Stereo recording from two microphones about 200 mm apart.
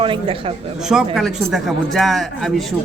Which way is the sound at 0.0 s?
25° right (ahead or behind).